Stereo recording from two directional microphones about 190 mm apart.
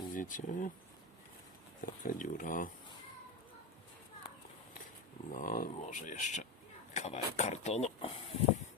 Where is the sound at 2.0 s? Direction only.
45° left (ahead or behind).